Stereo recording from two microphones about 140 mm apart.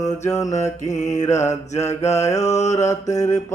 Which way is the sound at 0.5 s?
55° left (ahead or behind).